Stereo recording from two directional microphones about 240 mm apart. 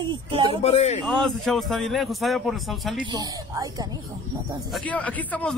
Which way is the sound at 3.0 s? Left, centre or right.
Centre.